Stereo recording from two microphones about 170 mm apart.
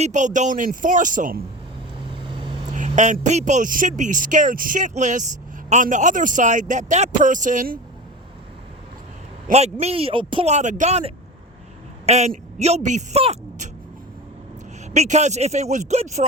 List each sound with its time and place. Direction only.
0.0 s speech: 45° right (ahead or behind)
2.2 s vehicle: 30° right (ahead or behind)
2.7 s speech: 45° right (ahead or behind)
9.5 s speech: 40° right (ahead or behind)
14.9 s speech: 40° right (ahead or behind)